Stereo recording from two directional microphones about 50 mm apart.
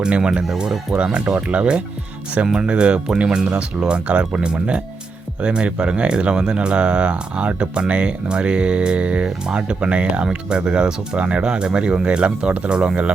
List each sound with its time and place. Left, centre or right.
0.0 s speech: centre